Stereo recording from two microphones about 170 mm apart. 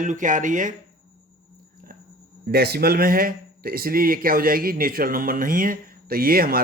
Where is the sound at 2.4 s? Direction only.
70° right (ahead or behind).